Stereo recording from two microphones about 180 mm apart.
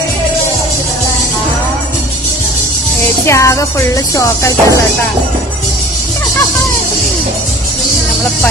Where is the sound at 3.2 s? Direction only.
15° left (ahead or behind).